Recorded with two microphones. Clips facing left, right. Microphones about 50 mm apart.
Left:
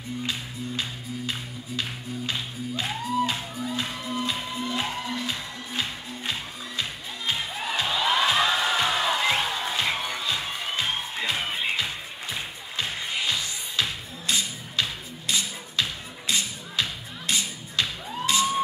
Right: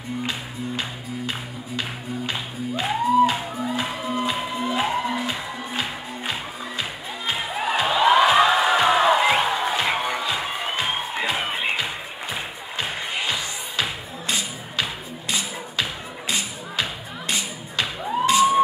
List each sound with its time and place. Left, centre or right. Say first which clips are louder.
0.2 s music: right 3 dB; centre